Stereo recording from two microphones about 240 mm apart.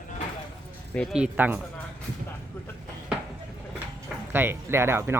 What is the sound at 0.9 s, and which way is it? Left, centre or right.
Speech, centre.